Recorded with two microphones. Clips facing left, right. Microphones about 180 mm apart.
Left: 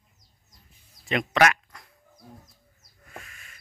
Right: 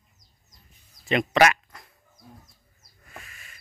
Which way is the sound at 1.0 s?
Centre (ahead or behind).